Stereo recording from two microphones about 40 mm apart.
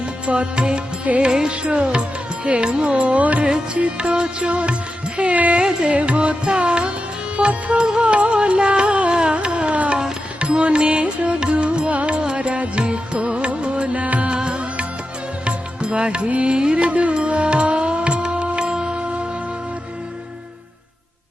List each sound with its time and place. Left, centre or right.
0.3 s music: right
8.1 s music: right
14.3 s music: right